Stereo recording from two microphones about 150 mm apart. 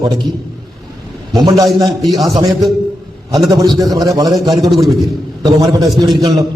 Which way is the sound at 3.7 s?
25° right (ahead or behind).